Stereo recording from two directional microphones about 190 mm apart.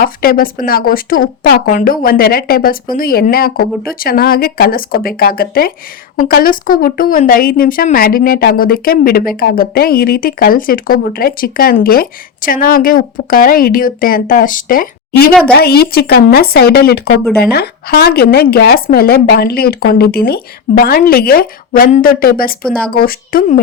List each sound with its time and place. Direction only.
0.0 s a woman's voice: 50° left (ahead or behind)